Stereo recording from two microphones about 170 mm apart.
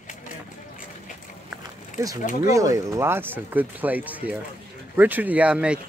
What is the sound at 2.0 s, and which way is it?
Speech, 20° right (ahead or behind).